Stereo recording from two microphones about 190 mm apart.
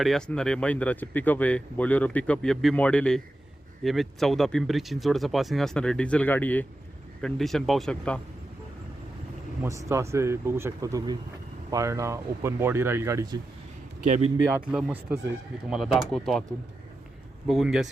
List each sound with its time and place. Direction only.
0.0 s speech: 5° left (ahead or behind)
9.6 s speech: 15° right (ahead or behind)
14.7 s speech: 5° right (ahead or behind)
17.5 s speech: centre (ahead or behind)